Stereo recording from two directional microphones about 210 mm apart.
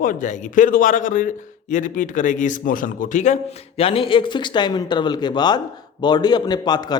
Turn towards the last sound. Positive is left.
turn(degrees=20)  # may be behind; listen again after turning